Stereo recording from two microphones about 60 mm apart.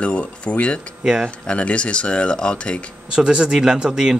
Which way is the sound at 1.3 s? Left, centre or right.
Centre.